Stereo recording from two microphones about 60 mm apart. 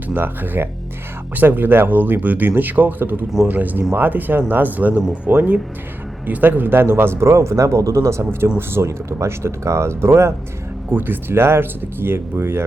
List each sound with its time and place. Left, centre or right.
0.1 s speech: right
8.2 s speech: right
10.9 s speech: right